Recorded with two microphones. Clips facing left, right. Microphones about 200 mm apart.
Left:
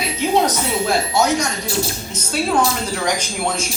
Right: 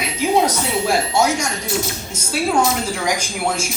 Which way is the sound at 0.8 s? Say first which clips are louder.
Right 1 dB; 10° right (ahead or behind).